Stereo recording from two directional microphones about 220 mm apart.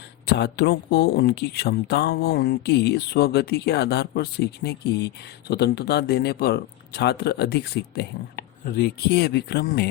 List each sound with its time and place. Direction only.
0.3 s speech: 50° left (ahead or behind)